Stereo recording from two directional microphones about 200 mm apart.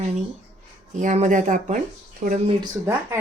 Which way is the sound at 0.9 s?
35° right (ahead or behind).